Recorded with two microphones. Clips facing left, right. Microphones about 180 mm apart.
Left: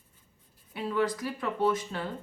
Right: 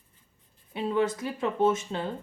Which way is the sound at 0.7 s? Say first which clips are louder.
Right 2 dB; 25° right (ahead or behind).